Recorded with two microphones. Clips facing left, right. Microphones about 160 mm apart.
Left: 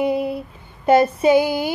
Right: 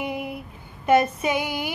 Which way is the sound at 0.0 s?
30° left (ahead or behind).